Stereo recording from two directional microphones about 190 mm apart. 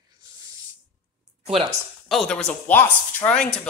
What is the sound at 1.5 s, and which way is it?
Speech, 30° right (ahead or behind).